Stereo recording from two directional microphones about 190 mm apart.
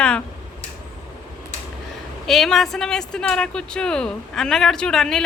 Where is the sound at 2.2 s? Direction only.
Centre (ahead or behind).